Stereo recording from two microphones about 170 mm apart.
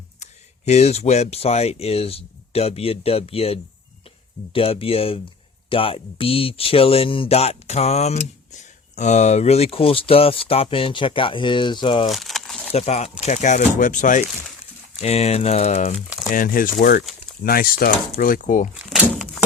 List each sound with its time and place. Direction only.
0.2 s speech: 40° left (ahead or behind)
12.0 s a sound: centre (ahead or behind)
12.7 s speech: 40° left (ahead or behind)
16.3 s speech: 55° left (ahead or behind)
18.9 s speech: centre (ahead or behind)